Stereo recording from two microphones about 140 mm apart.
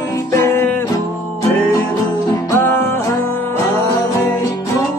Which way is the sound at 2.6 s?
15° left (ahead or behind).